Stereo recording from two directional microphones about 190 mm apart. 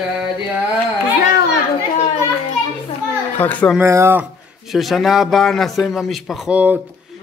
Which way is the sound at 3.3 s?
10° left (ahead or behind).